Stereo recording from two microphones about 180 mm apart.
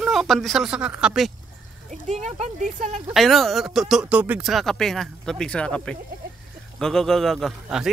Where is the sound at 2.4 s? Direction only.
40° right (ahead or behind).